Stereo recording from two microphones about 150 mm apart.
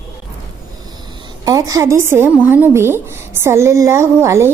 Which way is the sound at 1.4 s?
25° right (ahead or behind).